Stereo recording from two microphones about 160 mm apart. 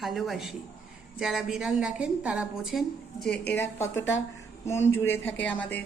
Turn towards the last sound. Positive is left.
turn(degrees=10)  # may be behind; listen again after turning